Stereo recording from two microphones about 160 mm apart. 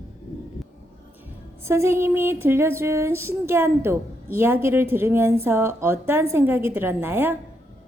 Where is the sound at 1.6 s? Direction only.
15° right (ahead or behind).